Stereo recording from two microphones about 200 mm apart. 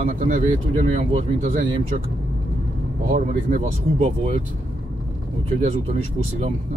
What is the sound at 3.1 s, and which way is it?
Speech, 40° right (ahead or behind).